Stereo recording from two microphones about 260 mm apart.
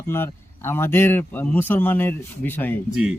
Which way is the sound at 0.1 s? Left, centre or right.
Centre.